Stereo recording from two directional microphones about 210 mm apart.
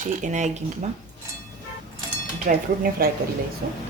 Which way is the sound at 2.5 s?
40° right (ahead or behind).